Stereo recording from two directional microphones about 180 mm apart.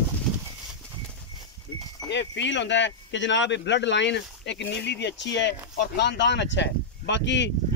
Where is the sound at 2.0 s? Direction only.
80° left.